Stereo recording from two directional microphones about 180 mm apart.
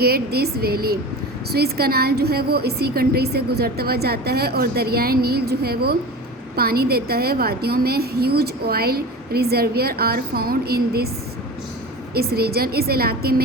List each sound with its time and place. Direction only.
0.0 s a woman's voice: 60° right (ahead or behind)
12.1 s a woman's voice: 60° right (ahead or behind)